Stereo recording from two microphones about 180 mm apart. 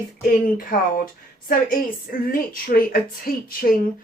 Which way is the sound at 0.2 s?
55° left (ahead or behind).